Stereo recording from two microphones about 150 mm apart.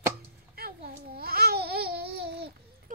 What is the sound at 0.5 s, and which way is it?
Babbling, 85° right.